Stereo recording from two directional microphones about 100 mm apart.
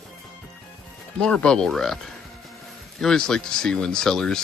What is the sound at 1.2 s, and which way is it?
Speech, 10° left (ahead or behind).